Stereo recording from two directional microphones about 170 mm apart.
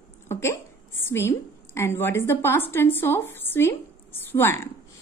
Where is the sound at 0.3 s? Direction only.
15° left (ahead or behind).